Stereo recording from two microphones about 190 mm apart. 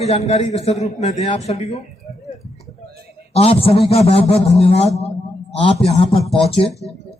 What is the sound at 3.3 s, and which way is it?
A man's voice, 30° left (ahead or behind).